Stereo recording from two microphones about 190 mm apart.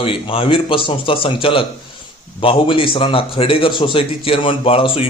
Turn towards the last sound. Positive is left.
turn(degrees=30)  # may be behind; listen again after turning